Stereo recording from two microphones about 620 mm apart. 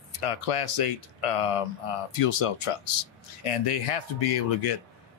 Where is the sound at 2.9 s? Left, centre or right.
Left.